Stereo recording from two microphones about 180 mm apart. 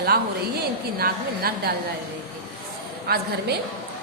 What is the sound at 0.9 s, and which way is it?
Speech, 60° right (ahead or behind).